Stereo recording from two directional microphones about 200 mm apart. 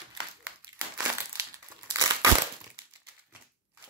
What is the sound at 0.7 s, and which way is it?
Crushing, 15° right (ahead or behind).